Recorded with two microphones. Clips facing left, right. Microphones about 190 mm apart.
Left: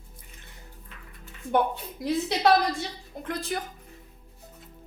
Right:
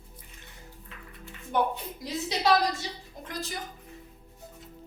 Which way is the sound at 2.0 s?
60° left (ahead or behind).